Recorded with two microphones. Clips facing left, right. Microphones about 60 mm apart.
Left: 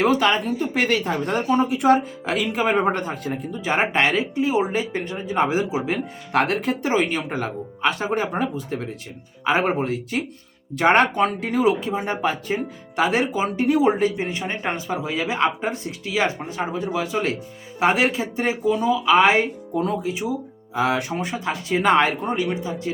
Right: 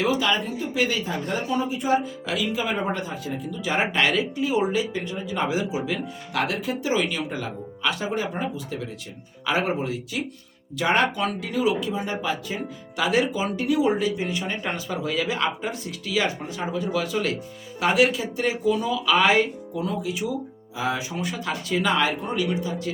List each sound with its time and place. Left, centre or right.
0.0 s speech: left
9.7 s speech: left
19.7 s speech: left
20.1 s speech: left
20.7 s speech: left
21.2 s speech: left
21.8 s speech: left